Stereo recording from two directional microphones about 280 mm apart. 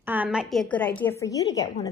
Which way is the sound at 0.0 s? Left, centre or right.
Centre.